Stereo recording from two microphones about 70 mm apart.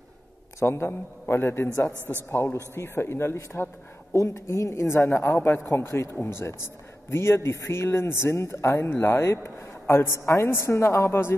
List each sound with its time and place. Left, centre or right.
0.6 s a man's voice: left